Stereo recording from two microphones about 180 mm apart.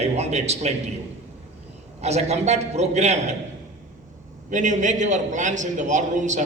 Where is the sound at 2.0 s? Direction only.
35° right (ahead or behind).